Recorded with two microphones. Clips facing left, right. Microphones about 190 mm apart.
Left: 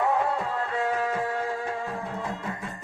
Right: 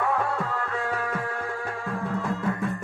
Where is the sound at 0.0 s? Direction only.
20° left (ahead or behind).